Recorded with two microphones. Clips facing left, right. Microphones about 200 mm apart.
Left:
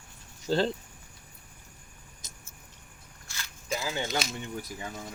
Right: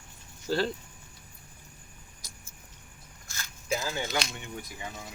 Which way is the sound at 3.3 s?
45° right (ahead or behind).